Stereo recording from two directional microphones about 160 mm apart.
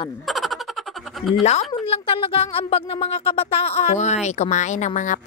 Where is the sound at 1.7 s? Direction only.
35° left (ahead or behind).